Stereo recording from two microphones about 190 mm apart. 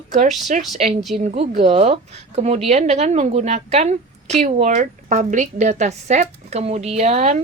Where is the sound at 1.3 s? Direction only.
30° right (ahead or behind).